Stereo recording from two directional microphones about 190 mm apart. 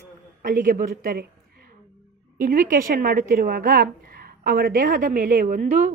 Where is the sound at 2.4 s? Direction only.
45° right (ahead or behind).